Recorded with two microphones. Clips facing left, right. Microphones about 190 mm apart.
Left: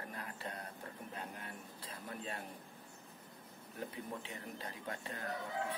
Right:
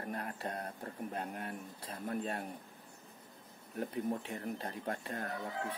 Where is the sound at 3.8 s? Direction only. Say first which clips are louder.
Right 8 dB; 50° right (ahead or behind).